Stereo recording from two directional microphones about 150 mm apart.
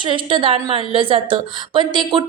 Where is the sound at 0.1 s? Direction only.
35° right (ahead or behind).